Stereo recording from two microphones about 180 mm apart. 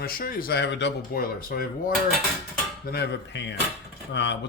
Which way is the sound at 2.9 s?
70° left (ahead or behind).